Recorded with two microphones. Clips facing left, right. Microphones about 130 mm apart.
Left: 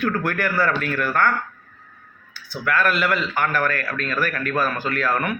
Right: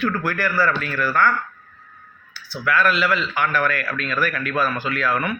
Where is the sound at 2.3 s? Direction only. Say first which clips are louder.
Right 1 dB; 50° left (ahead or behind).